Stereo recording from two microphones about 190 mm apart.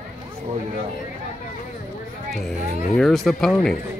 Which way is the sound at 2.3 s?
Centre (ahead or behind).